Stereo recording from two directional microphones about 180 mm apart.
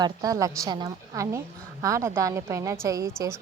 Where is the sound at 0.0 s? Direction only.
20° right (ahead or behind).